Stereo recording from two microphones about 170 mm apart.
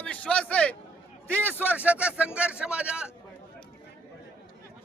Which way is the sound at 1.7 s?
10° right (ahead or behind).